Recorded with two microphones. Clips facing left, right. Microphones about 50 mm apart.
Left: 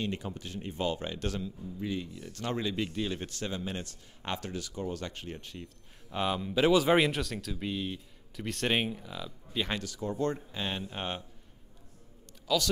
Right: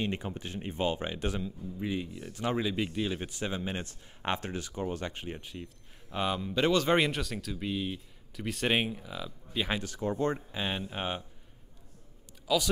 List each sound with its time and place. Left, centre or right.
0.0 s speech: right; by 9.8 s centre
9.8 s speech: right
10.5 s speech: centre
12.5 s speech: centre